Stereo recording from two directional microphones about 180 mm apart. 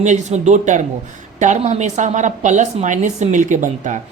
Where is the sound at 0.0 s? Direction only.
40° right (ahead or behind).